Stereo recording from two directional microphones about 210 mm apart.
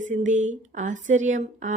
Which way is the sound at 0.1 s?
35° right (ahead or behind).